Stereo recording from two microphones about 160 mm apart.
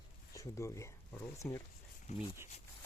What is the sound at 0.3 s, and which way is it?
Speech, 15° left (ahead or behind).